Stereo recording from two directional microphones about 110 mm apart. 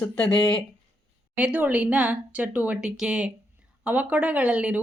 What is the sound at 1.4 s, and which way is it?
Speech, 15° right (ahead or behind).